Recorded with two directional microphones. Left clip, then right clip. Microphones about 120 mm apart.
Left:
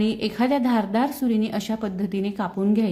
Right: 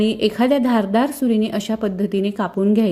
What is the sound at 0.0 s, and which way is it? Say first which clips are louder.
A woman's voice: right 6 dB; 30° right (ahead or behind).